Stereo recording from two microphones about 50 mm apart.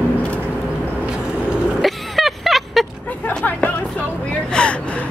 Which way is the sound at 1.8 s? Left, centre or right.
Centre.